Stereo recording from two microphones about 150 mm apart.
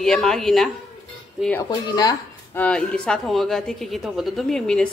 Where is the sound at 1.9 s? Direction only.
25° left (ahead or behind).